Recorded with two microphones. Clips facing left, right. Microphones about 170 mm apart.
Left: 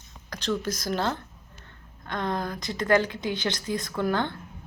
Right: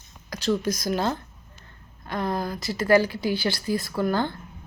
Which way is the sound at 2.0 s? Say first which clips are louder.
Right 2 dB; 10° right (ahead or behind).